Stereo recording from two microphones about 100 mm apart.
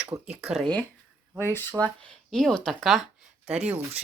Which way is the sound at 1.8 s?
25° right (ahead or behind).